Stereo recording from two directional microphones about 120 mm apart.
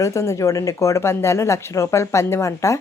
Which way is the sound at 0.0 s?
25° left (ahead or behind).